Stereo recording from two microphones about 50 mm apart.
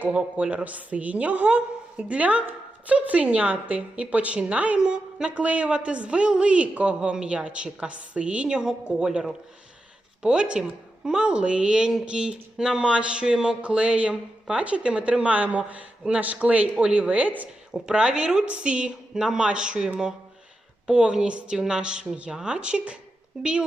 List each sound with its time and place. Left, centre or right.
0.1 s a woman's voice: right
17.8 s a woman's voice: centre